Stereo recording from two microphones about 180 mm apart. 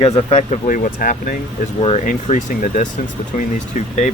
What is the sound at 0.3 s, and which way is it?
Speech, 40° left (ahead or behind).